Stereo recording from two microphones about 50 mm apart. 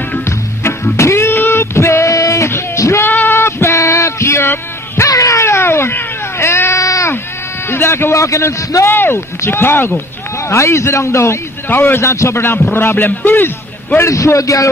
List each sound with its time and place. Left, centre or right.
0.9 s music: left
1.3 s a sound: left
1.6 s female singing: left
3.1 s a sound: left
3.3 s music: left
7.7 s a man's voice: left
10.5 s a man's voice: left
12.9 s a man's voice: left
13.9 s a man's voice: left